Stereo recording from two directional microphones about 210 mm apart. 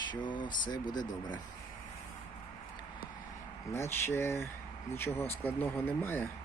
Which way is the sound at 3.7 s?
15° left (ahead or behind).